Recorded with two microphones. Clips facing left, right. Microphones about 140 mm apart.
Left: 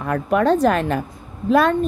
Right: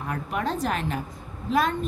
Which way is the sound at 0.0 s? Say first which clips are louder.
Left 10 dB; 85° left.